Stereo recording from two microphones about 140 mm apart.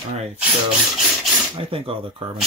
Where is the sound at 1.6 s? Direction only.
40° right (ahead or behind).